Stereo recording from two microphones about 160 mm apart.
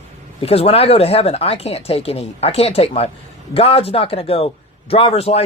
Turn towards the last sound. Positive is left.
turn(degrees=40)  # may be behind; listen again after turning